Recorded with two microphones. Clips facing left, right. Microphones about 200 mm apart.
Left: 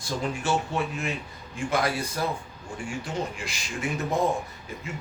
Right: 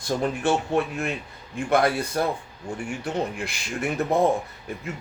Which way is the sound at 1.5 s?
60° right (ahead or behind).